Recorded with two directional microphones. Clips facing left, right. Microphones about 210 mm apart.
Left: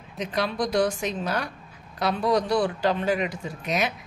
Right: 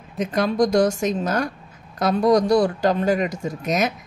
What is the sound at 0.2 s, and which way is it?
Speech, 45° right (ahead or behind).